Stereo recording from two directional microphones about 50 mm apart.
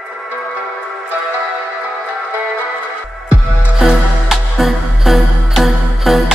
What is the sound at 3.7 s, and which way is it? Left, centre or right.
Music, centre.